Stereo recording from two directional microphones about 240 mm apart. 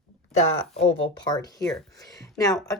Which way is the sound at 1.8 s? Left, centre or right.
Centre.